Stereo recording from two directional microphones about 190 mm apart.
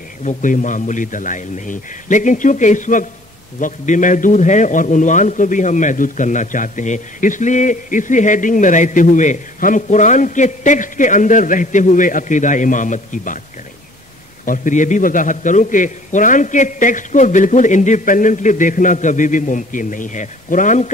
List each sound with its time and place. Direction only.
0.2 s a man's voice: 40° left (ahead or behind)
14.4 s a man's voice: 45° left (ahead or behind)